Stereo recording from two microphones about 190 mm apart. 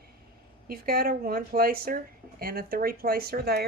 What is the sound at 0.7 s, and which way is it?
Speech, 50° right (ahead or behind).